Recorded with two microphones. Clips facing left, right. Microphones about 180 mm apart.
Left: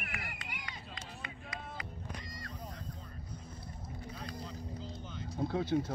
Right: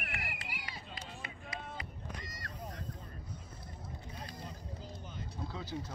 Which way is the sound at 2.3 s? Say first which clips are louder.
Left 2 dB; 75° right (ahead or behind).